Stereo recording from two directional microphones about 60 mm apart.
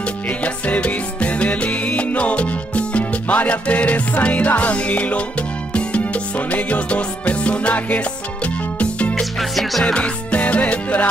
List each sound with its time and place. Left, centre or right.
0.4 s music: left
9.2 s music: centre
9.9 s music: left